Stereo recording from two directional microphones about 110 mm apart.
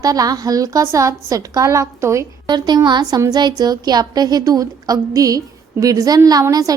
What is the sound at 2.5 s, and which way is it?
A woman's voice, 40° right (ahead or behind).